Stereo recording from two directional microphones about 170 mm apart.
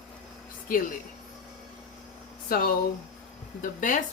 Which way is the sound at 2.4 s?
60° left (ahead or behind).